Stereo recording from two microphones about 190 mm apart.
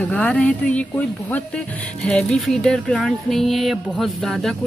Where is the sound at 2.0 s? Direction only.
5° left (ahead or behind).